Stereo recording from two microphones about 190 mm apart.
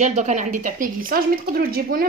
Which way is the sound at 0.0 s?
40° right (ahead or behind).